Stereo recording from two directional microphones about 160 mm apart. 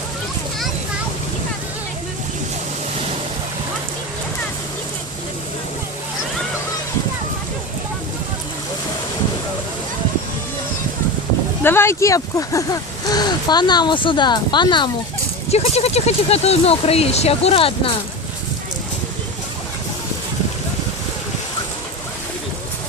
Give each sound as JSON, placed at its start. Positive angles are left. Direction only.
{"t": 11.6, "sound": "speech", "side_deg": 15}
{"t": 15.4, "sound": "speech", "side_deg": 40}